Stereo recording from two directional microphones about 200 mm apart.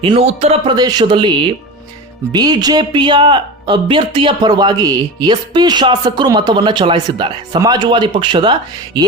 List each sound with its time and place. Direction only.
0.0 s speech: 30° right (ahead or behind)